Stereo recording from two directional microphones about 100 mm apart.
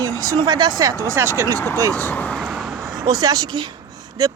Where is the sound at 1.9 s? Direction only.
15° left (ahead or behind).